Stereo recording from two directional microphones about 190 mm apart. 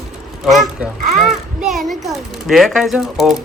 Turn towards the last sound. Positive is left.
turn(degrees=0)  # may be behind; listen again after turning